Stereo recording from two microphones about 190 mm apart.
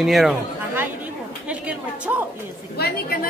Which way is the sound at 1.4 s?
5° right (ahead or behind).